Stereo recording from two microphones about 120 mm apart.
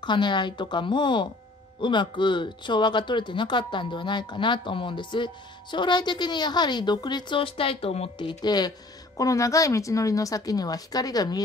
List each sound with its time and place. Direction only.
0.0 s speech: 40° left (ahead or behind)